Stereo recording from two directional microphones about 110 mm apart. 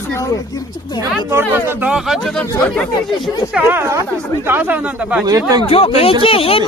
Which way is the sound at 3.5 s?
20° right (ahead or behind).